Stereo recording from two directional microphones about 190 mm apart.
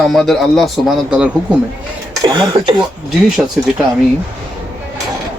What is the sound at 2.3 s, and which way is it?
Speech, 25° right (ahead or behind).